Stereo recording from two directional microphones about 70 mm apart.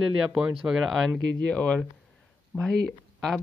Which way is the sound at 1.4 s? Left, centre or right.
Centre.